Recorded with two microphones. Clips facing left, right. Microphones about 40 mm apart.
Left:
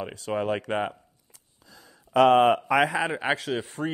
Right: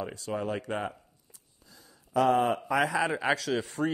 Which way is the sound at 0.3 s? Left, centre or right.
Left.